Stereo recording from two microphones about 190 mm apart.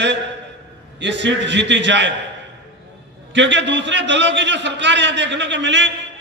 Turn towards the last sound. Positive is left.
turn(degrees=-70)  # may be behind; listen again after turning